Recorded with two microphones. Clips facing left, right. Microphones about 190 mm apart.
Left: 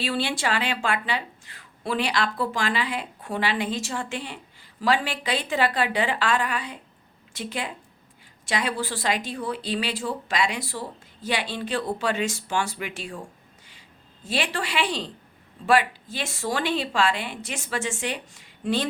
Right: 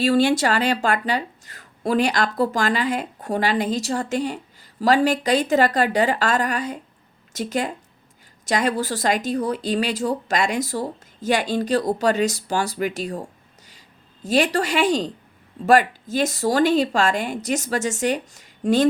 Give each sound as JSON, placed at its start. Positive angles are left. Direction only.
{"t": 0.0, "sound": "speech", "side_deg": -45}
{"t": 14.3, "sound": "speech", "side_deg": -40}